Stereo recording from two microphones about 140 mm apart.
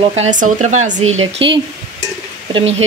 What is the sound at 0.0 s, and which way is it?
Speech, 50° right (ahead or behind).